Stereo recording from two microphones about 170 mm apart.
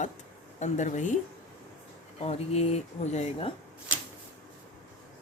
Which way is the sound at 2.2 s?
35° left (ahead or behind).